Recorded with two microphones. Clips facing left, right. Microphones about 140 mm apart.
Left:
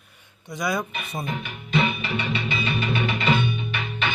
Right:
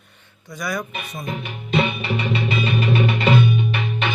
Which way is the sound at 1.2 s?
35° right (ahead or behind).